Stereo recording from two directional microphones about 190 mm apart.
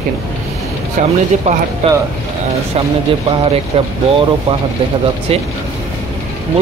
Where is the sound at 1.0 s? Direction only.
45° right (ahead or behind).